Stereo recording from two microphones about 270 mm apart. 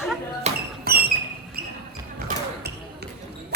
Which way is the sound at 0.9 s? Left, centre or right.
Right.